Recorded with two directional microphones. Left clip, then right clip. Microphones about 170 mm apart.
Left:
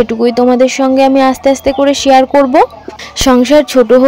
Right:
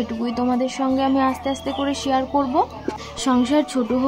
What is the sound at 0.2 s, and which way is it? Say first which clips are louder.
Speech: left 13 dB; 50° left (ahead or behind).